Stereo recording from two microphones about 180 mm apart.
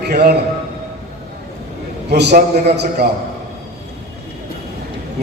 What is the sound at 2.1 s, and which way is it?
Speech, 65° right (ahead or behind).